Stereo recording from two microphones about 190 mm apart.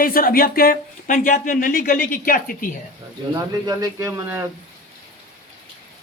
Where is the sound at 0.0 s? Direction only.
50° left (ahead or behind).